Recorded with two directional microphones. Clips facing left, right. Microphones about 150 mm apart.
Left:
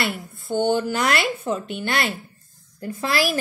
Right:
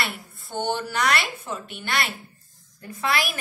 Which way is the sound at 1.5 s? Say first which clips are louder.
Left 5 dB; 30° left (ahead or behind).